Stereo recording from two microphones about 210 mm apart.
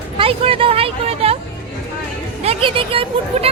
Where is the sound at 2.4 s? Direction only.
25° right (ahead or behind).